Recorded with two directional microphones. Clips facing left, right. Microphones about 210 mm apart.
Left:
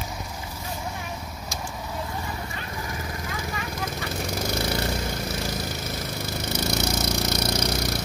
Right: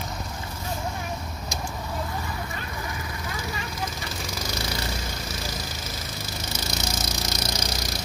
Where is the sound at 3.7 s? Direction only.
60° left (ahead or behind).